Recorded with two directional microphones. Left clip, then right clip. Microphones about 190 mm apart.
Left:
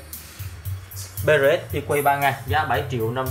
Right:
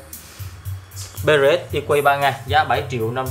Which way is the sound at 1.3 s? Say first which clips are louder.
Right 2 dB; 20° right (ahead or behind).